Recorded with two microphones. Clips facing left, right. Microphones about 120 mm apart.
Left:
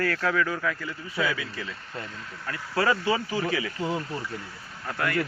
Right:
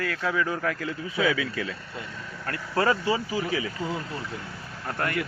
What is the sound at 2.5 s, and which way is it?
Speech, 55° right (ahead or behind).